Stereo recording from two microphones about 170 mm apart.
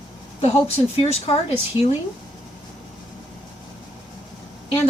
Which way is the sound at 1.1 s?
35° left (ahead or behind).